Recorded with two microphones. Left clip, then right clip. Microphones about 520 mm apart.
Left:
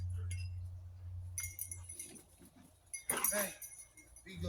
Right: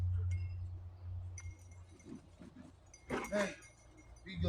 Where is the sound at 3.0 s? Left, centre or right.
Left.